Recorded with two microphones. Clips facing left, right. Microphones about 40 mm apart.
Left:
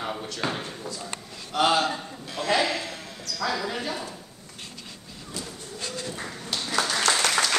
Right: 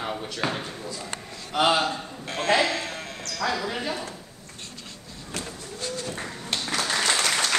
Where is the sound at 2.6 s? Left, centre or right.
Right.